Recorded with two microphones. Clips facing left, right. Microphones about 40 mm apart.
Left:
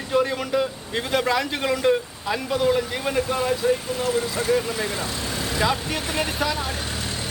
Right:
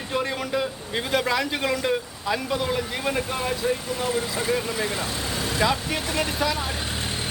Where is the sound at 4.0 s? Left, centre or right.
Centre.